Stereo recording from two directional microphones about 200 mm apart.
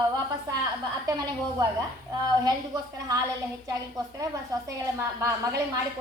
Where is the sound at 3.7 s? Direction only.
20° right (ahead or behind).